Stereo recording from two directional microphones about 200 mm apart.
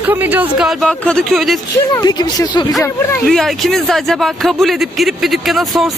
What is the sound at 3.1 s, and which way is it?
Speech, centre (ahead or behind).